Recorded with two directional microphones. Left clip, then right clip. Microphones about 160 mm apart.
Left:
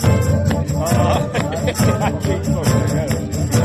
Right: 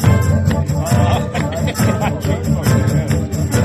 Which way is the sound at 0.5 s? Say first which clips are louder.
Even; 90° left.